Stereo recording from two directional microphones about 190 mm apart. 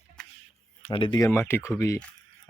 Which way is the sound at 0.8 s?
25° left (ahead or behind).